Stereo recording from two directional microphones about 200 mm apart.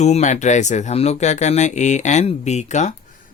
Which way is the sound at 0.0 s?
35° left (ahead or behind).